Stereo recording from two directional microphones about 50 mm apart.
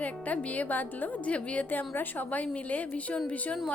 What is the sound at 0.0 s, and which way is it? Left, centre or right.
A woman's voice, left.